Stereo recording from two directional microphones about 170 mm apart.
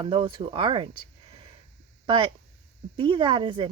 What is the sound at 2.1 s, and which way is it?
A woman's voice, 30° right (ahead or behind).